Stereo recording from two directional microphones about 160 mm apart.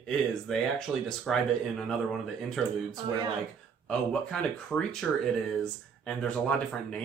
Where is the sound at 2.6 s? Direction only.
Centre (ahead or behind).